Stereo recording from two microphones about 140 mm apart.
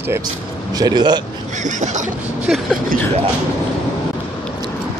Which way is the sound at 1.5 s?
60° right (ahead or behind).